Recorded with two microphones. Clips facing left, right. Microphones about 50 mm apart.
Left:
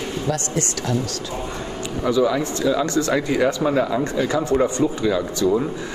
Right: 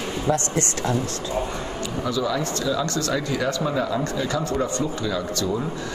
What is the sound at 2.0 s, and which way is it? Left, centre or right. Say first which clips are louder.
A man's voice: left 6 dB; left.